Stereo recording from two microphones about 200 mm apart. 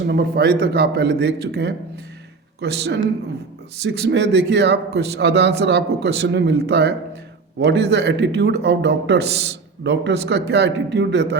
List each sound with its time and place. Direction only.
0.1 s a man's voice: 55° right (ahead or behind)